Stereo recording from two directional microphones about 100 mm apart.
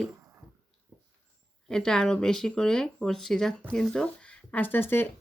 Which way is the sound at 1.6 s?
5° left (ahead or behind).